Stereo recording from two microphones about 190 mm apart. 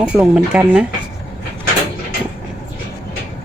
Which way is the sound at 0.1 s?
5° right (ahead or behind).